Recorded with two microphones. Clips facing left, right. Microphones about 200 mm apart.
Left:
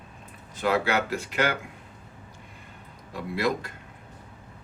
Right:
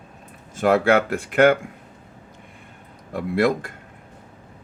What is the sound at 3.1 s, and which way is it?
Speech, 50° right (ahead or behind).